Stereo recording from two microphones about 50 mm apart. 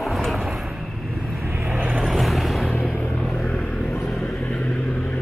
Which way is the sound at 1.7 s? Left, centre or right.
Right.